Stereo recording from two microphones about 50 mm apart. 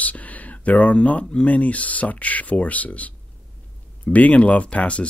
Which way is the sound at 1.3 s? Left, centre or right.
Left.